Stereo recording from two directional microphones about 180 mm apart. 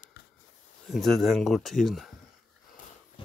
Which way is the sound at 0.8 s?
Centre (ahead or behind).